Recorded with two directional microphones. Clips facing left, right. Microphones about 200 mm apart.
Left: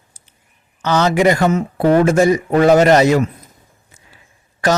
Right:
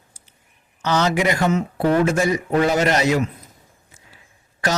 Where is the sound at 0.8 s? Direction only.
50° left (ahead or behind).